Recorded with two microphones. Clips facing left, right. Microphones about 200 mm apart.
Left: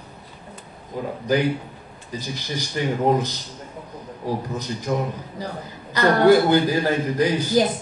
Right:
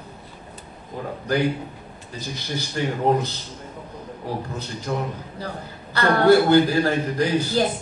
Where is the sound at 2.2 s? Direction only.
15° left (ahead or behind).